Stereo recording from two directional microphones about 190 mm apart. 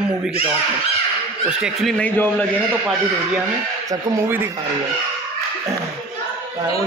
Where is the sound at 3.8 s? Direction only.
10° right (ahead or behind).